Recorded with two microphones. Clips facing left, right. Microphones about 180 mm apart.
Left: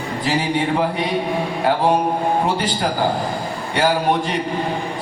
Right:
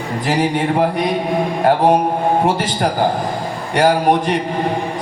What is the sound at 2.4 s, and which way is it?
A man's voice, 45° right (ahead or behind).